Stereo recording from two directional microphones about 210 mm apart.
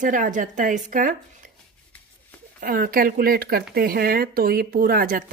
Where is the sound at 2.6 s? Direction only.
45° right (ahead or behind).